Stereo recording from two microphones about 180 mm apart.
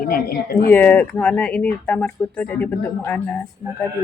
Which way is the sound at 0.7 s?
10° left (ahead or behind).